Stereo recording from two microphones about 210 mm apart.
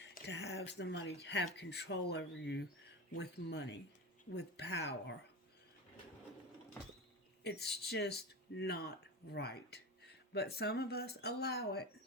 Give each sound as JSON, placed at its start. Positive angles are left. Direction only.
{"t": 0.0, "sound": "a sound", "side_deg": 55}
{"t": 1.2, "sound": "speech", "side_deg": 55}
{"t": 7.4, "sound": "speech", "side_deg": 50}